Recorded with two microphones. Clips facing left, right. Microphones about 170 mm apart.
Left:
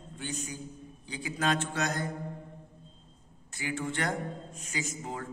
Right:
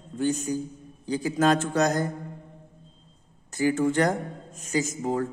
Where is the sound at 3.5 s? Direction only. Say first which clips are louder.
Right 12 dB; 45° right (ahead or behind).